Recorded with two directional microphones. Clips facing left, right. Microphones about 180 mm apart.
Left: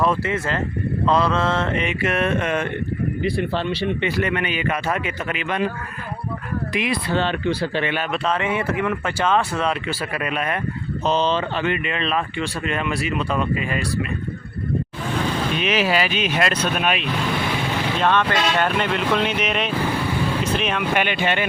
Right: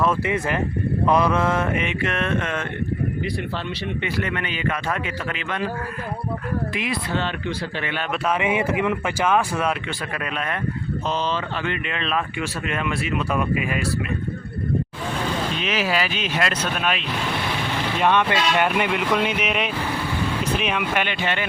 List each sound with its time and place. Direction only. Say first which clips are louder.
0.3 s speech: right 1 dB; 15° right (ahead or behind); by 2.6 s 15° left (ahead or behind)
3.2 s speech: left 5 dB; 30° left (ahead or behind)
4.2 s speech: left 3 dB; 15° left (ahead or behind)
7.2 s speech: left 5 dB; 30° left (ahead or behind)
8.1 s speech: right 3 dB; 10° right (ahead or behind)
10.2 s speech: left 3 dB; 10° left (ahead or behind)
11.0 s speech: left 6 dB; 25° left (ahead or behind)
11.7 s speech: left 3 dB; centre (ahead or behind)
15.5 s speech: left 5 dB; 20° left (ahead or behind)
18.0 s speech: right 1 dB; 15° right (ahead or behind)
20.9 s speech: left 3 dB; 10° left (ahead or behind)